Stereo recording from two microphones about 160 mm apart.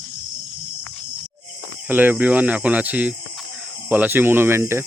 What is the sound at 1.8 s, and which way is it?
Speech, 10° right (ahead or behind).